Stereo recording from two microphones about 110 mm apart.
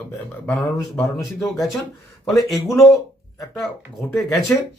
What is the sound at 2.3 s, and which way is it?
Speech, centre (ahead or behind).